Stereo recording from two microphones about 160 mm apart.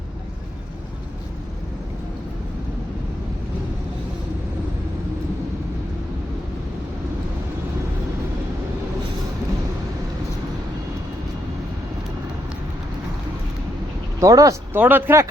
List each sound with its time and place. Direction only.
14.2 s speech: 20° right (ahead or behind)